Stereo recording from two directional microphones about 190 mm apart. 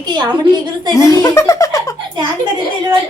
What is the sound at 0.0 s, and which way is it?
Speech, 20° right (ahead or behind).